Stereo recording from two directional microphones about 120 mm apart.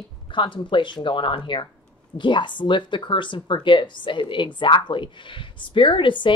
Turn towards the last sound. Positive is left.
turn(degrees=45)  # may be behind; listen again after turning